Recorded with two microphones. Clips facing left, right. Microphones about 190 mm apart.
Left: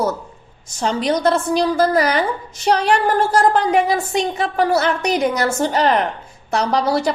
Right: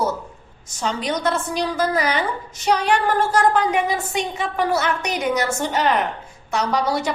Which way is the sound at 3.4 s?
35° left (ahead or behind).